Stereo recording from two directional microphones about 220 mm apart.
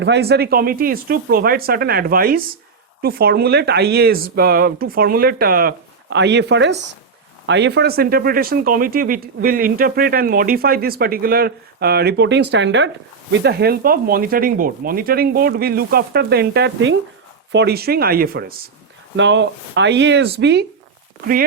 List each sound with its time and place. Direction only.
0.0 s speech: 50° right (ahead or behind)
19.1 s speech: 55° right (ahead or behind)